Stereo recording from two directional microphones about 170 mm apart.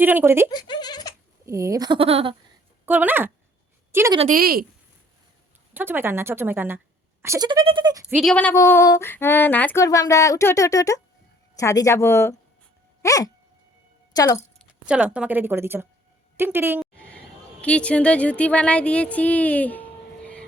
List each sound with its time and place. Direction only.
0.0 s a woman's voice: 10° right (ahead or behind)
0.5 s speech: 25° left (ahead or behind)
1.5 s speech: 20° right (ahead or behind); by 2.3 s 35° right (ahead or behind)
2.8 s a woman's voice: 10° right (ahead or behind)
4.3 s speech: 60° right (ahead or behind)
5.7 s a woman's voice: 10° right (ahead or behind)
8.1 s female singing: centre (ahead or behind)
9.8 s speech: 20° left (ahead or behind)
11.5 s female singing: 20° left (ahead or behind)
13.0 s dog: 20° left (ahead or behind)
14.2 s speech: 20° left (ahead or behind)
14.8 s a woman's voice: 5° right (ahead or behind)
17.6 s speech: 5° left (ahead or behind)